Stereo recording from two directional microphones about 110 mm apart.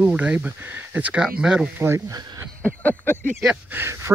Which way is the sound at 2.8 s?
15° left (ahead or behind).